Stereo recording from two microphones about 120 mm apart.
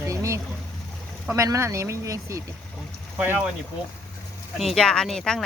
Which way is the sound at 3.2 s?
15° right (ahead or behind).